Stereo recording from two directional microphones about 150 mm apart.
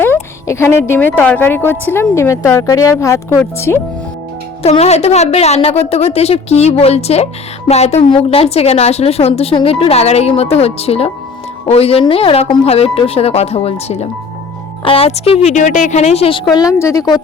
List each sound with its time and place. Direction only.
0.0 s a sound: 15° left (ahead or behind)
1.2 s a woman's voice: 10° left (ahead or behind)
4.6 s a woman's voice: 45° left (ahead or behind); by 17.2 s 20° left (ahead or behind)